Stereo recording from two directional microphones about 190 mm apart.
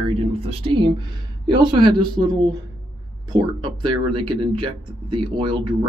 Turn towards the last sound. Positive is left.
turn(degrees=-25)  # may be behind; listen again after turning